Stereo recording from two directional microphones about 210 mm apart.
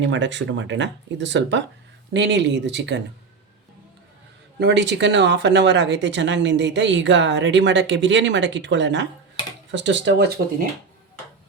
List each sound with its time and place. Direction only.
0.1 s speech: 60° right (ahead or behind)
4.6 s speech: 55° right (ahead or behind)